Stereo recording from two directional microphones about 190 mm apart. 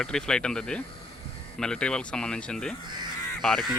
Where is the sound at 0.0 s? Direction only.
5° left (ahead or behind).